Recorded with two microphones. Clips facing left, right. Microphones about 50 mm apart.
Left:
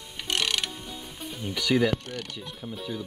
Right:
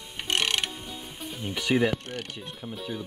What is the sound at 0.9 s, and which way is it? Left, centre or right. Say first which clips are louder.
Music: even; centre.